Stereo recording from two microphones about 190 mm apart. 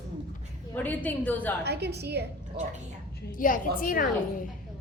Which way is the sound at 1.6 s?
60° right (ahead or behind).